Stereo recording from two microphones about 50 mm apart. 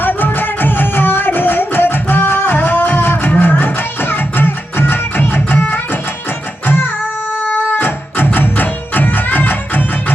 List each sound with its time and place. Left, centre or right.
0.0 s music: left
7.4 s music: left